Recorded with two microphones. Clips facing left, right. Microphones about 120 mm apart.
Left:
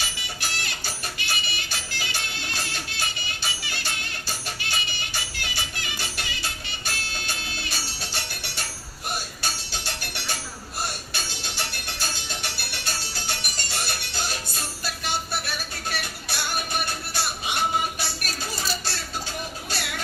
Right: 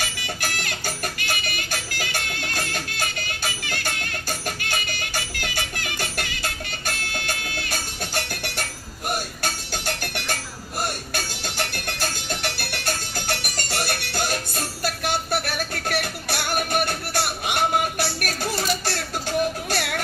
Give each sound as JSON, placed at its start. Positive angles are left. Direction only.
{"t": 0.0, "sound": "music", "side_deg": -55}
{"t": 9.0, "sound": "doorbell", "side_deg": -50}
{"t": 11.1, "sound": "music", "side_deg": -50}